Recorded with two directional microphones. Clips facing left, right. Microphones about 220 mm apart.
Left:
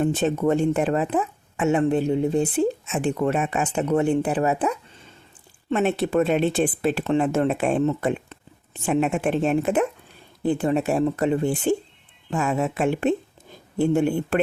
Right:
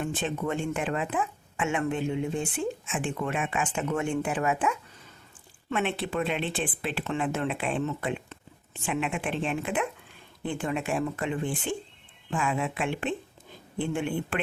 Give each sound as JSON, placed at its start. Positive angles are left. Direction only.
{"t": 0.0, "sound": "speech", "side_deg": 40}